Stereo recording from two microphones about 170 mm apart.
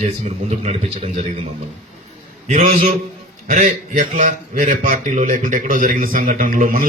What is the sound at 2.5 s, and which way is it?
A man's voice, 40° right (ahead or behind).